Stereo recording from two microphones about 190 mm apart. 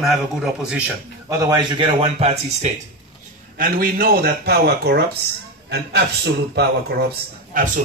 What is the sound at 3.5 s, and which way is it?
Speech, 50° right (ahead or behind).